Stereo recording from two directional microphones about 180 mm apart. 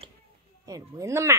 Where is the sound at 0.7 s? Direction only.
15° right (ahead or behind).